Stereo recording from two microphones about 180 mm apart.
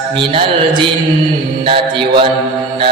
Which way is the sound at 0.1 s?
30° right (ahead or behind).